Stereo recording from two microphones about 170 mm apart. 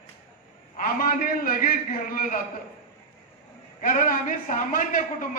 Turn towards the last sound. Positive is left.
turn(degrees=50)  # may be behind; listen again after turning